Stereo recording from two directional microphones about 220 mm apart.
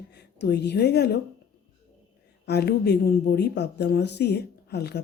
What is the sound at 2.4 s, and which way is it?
Speech, 45° left (ahead or behind).